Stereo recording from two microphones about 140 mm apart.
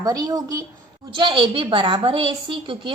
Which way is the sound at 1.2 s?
35° right (ahead or behind).